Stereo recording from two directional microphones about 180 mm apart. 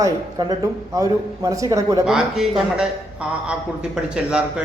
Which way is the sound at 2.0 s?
5° right (ahead or behind).